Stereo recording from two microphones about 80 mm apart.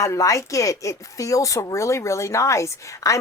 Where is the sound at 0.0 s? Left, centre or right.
Left.